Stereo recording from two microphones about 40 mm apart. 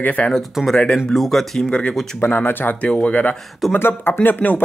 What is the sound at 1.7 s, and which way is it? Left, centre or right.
Speech, left.